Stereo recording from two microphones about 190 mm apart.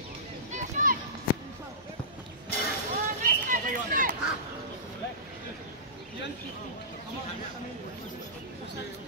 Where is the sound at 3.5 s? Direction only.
45° right (ahead or behind).